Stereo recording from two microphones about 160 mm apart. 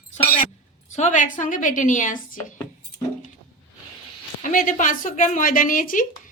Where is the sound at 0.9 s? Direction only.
50° left (ahead or behind).